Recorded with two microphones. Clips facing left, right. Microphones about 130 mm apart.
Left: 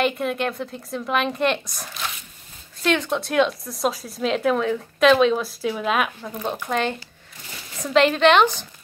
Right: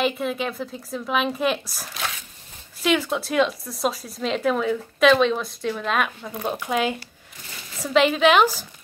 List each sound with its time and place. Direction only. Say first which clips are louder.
0.0 s speech: left 1 dB; centre (ahead or behind)